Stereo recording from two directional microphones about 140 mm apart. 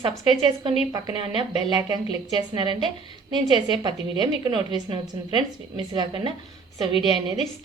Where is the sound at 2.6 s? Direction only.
35° right (ahead or behind).